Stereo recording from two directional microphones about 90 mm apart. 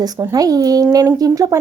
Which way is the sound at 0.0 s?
40° right (ahead or behind).